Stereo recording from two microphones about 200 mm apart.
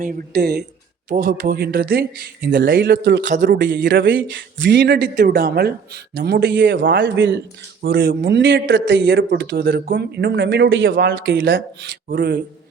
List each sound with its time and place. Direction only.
0.0 s a man's voice: 55° right (ahead or behind)
7.8 s a man's voice: 50° right (ahead or behind); by 10.9 s 70° right (ahead or behind)
10.9 s a man's voice: 60° right (ahead or behind)